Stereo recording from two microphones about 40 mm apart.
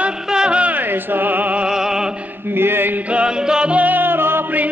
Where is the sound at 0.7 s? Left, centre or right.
Right.